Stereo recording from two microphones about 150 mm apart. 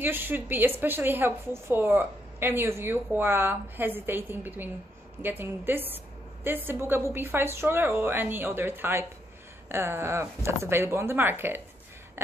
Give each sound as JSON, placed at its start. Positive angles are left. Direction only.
{"t": 0.0, "sound": "a woman's voice", "side_deg": -15}